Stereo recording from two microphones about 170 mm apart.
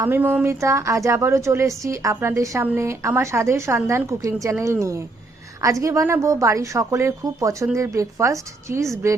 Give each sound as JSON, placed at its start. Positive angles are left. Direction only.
{"t": 0.0, "sound": "a woman's voice", "side_deg": -15}